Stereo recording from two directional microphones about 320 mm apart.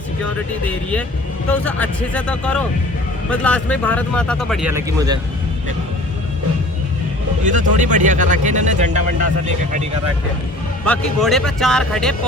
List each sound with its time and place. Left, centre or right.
0.6 s speech: centre
7.4 s speech: right
10.8 s speech: centre